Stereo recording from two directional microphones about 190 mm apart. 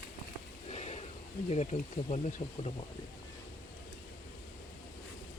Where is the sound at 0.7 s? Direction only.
35° left (ahead or behind).